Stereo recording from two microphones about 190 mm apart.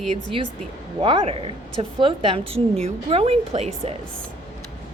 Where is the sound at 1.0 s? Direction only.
30° right (ahead or behind).